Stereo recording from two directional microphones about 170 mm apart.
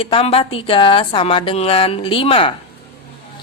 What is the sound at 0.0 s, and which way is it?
A woman's voice, 35° left (ahead or behind).